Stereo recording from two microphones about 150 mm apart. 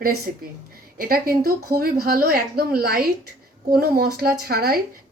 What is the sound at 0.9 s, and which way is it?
A woman's voice, 80° right.